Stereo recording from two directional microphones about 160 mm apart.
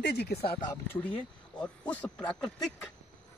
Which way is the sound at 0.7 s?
15° left (ahead or behind).